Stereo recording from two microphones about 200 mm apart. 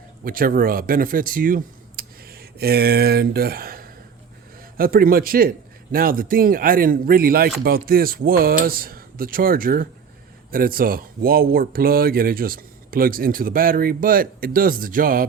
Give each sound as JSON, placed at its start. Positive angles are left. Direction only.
{"t": 0.3, "sound": "speech", "side_deg": -45}